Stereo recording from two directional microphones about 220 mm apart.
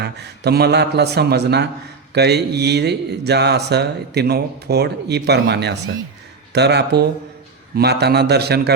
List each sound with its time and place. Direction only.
0.0 s a man's voice: 50° right (ahead or behind)